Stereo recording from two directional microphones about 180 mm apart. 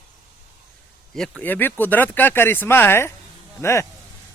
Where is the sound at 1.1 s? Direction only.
5° left (ahead or behind).